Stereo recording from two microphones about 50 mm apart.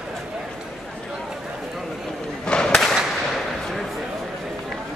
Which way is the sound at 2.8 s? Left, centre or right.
Centre.